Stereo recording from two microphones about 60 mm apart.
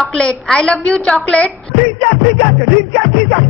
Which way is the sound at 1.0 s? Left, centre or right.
Centre.